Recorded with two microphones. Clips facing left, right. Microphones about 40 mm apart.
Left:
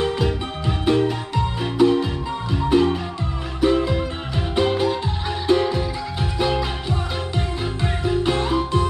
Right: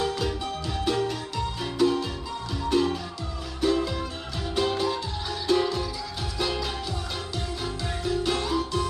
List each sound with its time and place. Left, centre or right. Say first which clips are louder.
0.0 s music: left 5 dB; left